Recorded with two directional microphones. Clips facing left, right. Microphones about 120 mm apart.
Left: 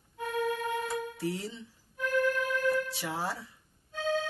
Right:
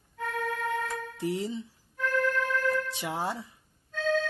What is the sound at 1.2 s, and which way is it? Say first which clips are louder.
Speech: right 4 dB; 15° right (ahead or behind).